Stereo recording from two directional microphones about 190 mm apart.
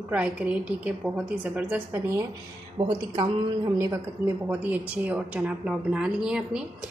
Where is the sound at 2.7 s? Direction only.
25° right (ahead or behind).